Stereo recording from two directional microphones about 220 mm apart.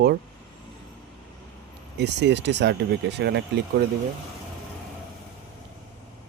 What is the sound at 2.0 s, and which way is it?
Speech, 50° right (ahead or behind).